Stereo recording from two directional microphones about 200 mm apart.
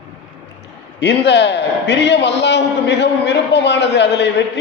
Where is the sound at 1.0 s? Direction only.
60° left (ahead or behind).